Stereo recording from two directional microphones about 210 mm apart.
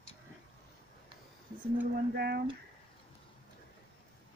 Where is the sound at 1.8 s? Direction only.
50° right (ahead or behind).